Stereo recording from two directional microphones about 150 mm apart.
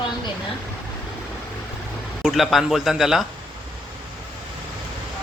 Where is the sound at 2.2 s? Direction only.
Centre (ahead or behind).